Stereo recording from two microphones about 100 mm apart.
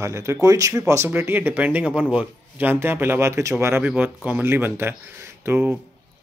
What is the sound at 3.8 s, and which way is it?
Speech, 15° right (ahead or behind).